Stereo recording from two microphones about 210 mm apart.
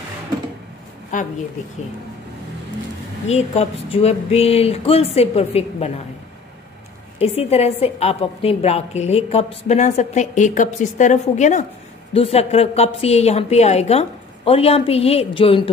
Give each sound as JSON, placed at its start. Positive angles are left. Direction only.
{"t": 1.1, "sound": "a woman's voice", "side_deg": 40}
{"t": 3.3, "sound": "a woman's voice", "side_deg": 30}
{"t": 7.2, "sound": "a woman's voice", "side_deg": 30}